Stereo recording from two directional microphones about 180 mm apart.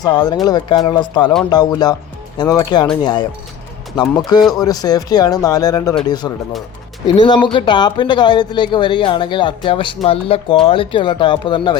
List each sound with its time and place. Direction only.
0.0 s speech: 20° left (ahead or behind)
7.2 s speech: 25° left (ahead or behind)